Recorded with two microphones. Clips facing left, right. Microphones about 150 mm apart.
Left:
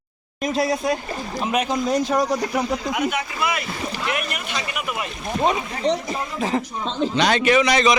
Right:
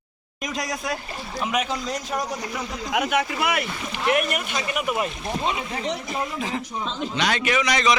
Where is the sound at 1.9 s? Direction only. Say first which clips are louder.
Left 8 dB; 65° left (ahead or behind).